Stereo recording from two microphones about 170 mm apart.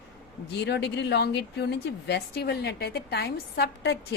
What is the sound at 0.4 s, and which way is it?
A woman's voice, 80° left.